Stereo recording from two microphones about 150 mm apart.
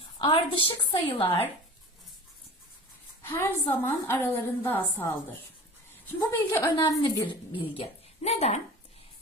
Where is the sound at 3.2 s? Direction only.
15° left (ahead or behind).